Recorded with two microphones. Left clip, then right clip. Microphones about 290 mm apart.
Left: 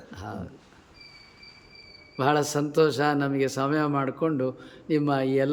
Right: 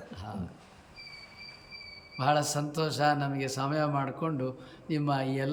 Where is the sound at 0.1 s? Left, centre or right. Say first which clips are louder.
Left 8 dB; centre.